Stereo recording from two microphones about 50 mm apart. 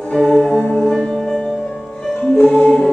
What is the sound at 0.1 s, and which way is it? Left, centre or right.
Music, centre.